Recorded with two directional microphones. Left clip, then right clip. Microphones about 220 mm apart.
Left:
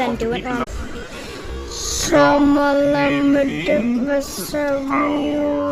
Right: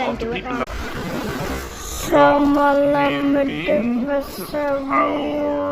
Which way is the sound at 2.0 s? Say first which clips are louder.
Even; 20° left (ahead or behind).